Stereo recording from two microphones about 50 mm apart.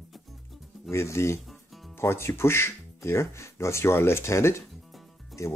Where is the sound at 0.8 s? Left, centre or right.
Left.